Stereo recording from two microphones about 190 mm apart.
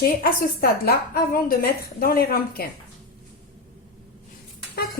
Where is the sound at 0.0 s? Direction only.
50° left (ahead or behind).